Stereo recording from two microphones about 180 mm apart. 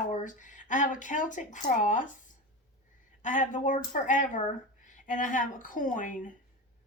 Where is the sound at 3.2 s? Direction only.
45° left (ahead or behind).